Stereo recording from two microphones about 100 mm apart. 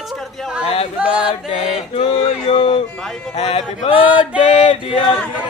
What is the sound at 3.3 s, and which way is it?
Speech, 90° left.